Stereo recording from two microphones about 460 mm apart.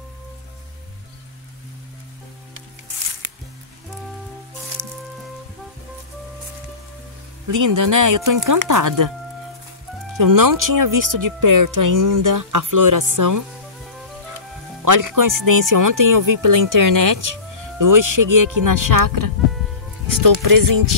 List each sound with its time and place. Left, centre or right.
4.8 s music: right
7.4 s speech: right
10.1 s speech: right
14.9 s speech: right